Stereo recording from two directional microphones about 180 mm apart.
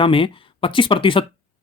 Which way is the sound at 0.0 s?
30° left (ahead or behind).